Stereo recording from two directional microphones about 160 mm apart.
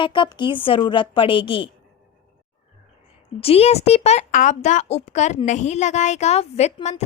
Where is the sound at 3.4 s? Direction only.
40° left (ahead or behind).